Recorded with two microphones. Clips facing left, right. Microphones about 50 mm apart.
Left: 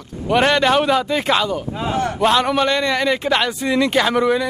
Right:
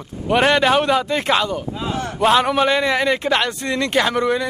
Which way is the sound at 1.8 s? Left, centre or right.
Left.